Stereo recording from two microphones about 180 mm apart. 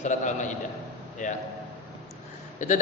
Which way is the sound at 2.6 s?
40° left (ahead or behind).